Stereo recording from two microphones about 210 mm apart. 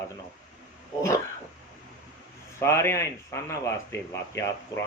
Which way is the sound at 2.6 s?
10° left (ahead or behind).